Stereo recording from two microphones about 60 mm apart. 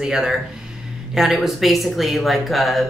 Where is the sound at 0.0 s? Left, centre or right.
Centre.